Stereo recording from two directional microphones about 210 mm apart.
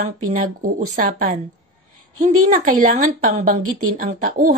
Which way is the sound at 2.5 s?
40° right (ahead or behind).